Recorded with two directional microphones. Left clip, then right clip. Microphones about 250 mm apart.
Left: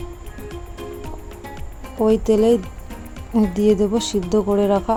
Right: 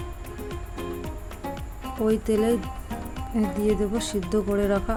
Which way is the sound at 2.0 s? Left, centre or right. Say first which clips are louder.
Left 7 dB; centre.